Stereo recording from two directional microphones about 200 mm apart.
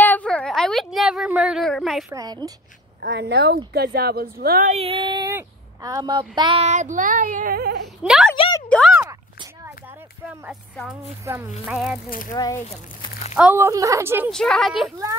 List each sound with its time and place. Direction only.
0.0 s a woman's voice: 5° left (ahead or behind)
2.1 s speech: 20° right (ahead or behind)
3.1 s speech: 55° right (ahead or behind)
4.7 s speech: 25° right (ahead or behind); by 7.9 s 55° right (ahead or behind)
8.0 s a woman's voice: centre (ahead or behind)
8.5 s a sound: 5° left (ahead or behind)
8.9 s dog: 10° right (ahead or behind)
11.3 s a woman's voice: 10° right (ahead or behind)
12.1 s speech: 40° left (ahead or behind)
12.4 s speech: 15° left (ahead or behind)
13.3 s speech: 10° right (ahead or behind)
14.3 s a woman's voice: centre (ahead or behind)